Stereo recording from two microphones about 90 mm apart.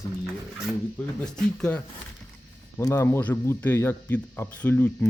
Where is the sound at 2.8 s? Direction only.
35° left (ahead or behind).